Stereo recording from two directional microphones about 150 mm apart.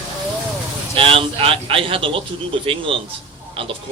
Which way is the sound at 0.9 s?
35° right (ahead or behind).